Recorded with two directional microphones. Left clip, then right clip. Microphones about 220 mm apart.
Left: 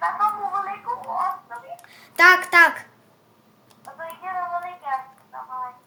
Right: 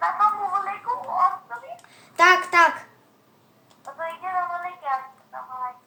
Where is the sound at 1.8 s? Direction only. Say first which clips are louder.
Left 2 dB; 30° left (ahead or behind).